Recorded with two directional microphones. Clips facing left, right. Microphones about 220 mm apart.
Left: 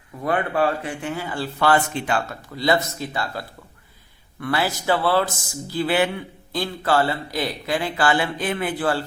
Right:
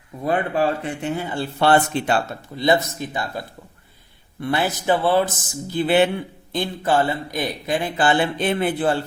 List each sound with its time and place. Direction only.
0.2 s a man's voice: 20° right (ahead or behind)